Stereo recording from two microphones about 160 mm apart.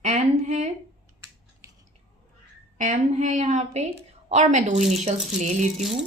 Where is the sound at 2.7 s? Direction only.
50° right (ahead or behind).